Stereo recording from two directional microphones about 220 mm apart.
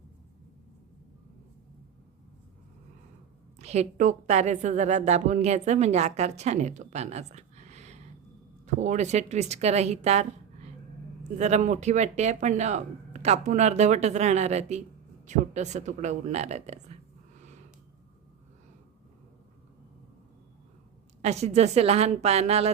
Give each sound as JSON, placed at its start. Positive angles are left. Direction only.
{"t": 3.6, "sound": "a woman's voice", "side_deg": -30}
{"t": 21.2, "sound": "a woman's voice", "side_deg": -30}